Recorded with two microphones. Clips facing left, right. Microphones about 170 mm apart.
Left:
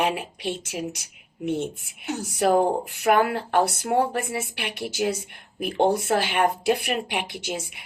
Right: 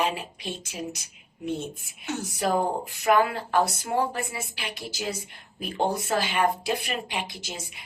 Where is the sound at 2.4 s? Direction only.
65° left (ahead or behind).